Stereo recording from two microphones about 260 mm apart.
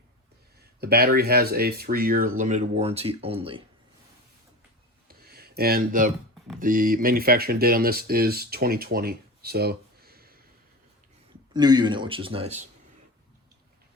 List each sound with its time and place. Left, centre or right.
0.6 s speech: right
5.0 s a sound: right
6.6 s speech: right
11.5 s a man's voice: centre